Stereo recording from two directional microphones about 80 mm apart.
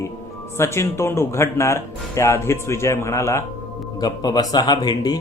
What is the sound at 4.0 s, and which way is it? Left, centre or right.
Speech, left.